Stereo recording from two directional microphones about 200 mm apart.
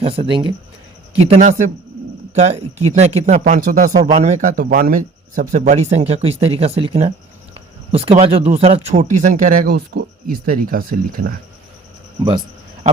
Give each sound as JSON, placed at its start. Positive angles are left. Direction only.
{"t": 0.0, "sound": "speech", "side_deg": -25}
{"t": 12.2, "sound": "speech", "side_deg": -20}